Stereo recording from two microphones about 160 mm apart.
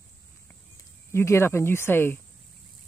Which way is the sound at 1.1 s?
15° left (ahead or behind).